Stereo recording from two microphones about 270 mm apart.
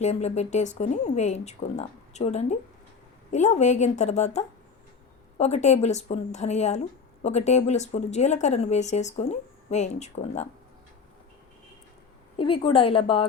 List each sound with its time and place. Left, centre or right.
0.0 s a woman's voice: left
12.4 s a woman's voice: centre